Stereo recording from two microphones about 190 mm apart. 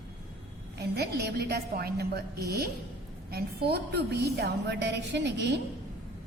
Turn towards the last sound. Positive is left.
turn(degrees=-65)  # may be behind; listen again after turning